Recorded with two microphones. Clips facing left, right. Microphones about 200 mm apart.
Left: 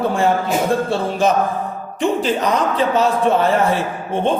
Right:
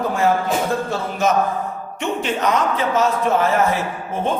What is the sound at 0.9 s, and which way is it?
A man's voice, 30° left (ahead or behind).